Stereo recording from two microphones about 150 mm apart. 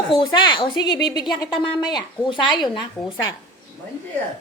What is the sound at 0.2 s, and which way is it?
Speech, 30° left (ahead or behind).